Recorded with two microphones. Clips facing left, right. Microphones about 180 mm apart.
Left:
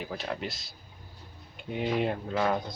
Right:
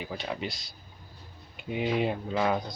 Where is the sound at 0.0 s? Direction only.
Centre (ahead or behind).